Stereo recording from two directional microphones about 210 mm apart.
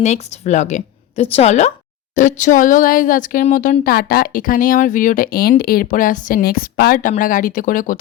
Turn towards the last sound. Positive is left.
turn(degrees=40)  # may be behind; listen again after turning